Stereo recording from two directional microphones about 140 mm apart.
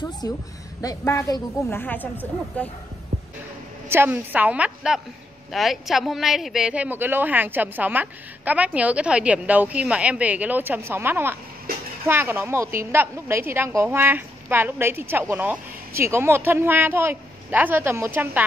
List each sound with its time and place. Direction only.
0.2 s a woman's voice: 25° left (ahead or behind)
3.9 s a woman's voice: 15° right (ahead or behind)